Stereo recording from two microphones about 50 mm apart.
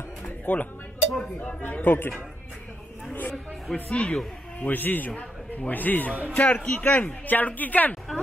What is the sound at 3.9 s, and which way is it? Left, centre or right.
Speech, left.